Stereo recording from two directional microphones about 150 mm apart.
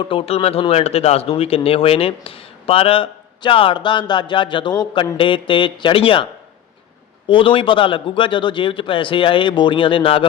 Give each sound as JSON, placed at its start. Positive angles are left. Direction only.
{"t": 0.0, "sound": "speech", "side_deg": 35}
{"t": 7.3, "sound": "speech", "side_deg": 35}